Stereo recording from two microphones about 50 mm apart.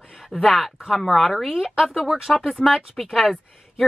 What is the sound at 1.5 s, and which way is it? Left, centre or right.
Speech, centre.